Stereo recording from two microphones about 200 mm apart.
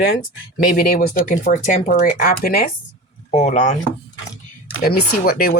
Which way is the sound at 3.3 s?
35° left (ahead or behind).